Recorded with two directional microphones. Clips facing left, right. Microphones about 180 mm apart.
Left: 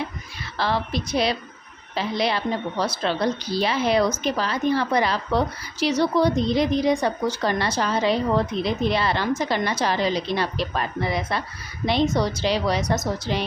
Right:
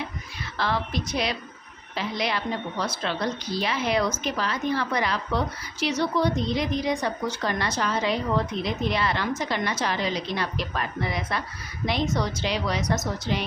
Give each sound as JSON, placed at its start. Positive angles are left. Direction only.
{"t": 0.5, "sound": "a woman's voice", "side_deg": 30}